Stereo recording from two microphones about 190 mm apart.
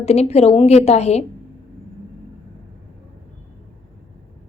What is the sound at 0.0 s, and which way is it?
A woman's voice, 35° left (ahead or behind).